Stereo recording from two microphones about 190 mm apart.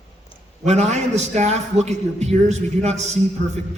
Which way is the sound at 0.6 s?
35° right (ahead or behind).